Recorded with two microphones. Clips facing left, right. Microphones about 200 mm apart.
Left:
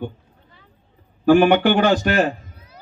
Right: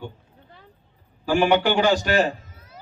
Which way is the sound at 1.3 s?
55° left (ahead or behind).